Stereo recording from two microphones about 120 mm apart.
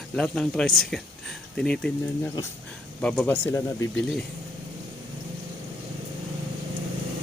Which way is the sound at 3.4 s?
20° left (ahead or behind).